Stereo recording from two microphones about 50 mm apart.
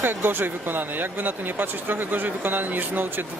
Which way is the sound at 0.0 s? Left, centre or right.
Right.